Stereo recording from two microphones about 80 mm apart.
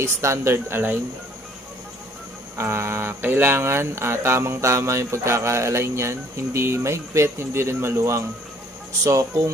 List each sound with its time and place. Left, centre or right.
0.0 s speech: right
2.5 s speech: right